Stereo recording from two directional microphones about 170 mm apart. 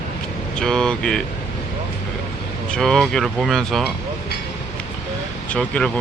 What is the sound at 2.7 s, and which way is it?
Speech, 5° left (ahead or behind).